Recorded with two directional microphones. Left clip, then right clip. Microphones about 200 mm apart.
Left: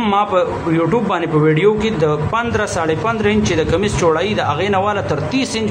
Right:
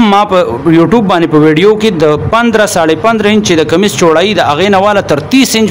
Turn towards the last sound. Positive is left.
turn(degrees=-55)  # may be behind; listen again after turning